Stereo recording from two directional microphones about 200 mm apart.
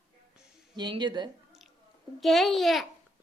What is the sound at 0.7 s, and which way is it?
Speech, 25° right (ahead or behind).